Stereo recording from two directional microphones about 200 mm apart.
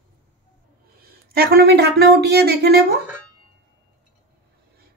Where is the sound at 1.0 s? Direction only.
50° right (ahead or behind).